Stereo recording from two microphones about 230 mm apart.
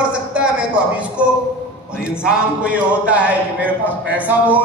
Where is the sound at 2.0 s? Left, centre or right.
Centre.